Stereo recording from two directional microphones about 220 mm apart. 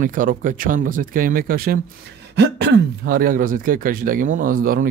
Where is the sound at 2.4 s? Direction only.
50° right (ahead or behind).